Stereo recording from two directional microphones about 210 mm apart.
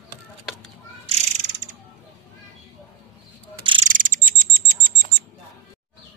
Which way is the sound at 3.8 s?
40° right (ahead or behind).